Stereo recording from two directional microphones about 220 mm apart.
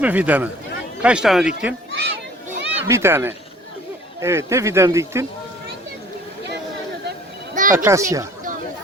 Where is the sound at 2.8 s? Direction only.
10° right (ahead or behind).